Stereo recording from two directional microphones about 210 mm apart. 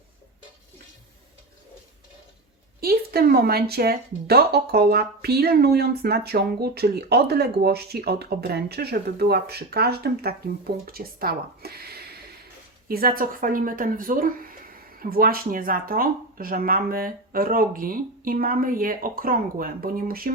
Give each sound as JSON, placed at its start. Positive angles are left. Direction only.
{"t": 2.8, "sound": "speech", "side_deg": -45}